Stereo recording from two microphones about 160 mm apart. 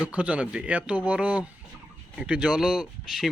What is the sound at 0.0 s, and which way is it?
Speech, 10° right (ahead or behind).